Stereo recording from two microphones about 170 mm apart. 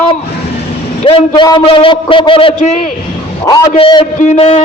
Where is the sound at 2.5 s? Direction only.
45° left (ahead or behind).